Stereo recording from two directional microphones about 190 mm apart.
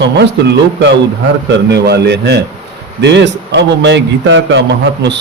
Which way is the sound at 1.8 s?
60° right (ahead or behind).